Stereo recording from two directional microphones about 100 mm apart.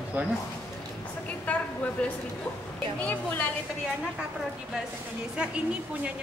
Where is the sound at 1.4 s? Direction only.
15° left (ahead or behind).